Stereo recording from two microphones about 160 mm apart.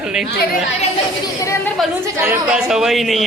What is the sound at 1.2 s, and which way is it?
Speech, 20° left (ahead or behind).